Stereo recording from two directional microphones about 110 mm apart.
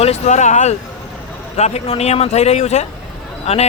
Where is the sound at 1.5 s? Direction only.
80° left.